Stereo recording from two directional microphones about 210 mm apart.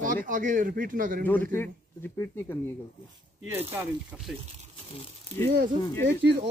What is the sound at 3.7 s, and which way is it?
Speech, 10° right (ahead or behind).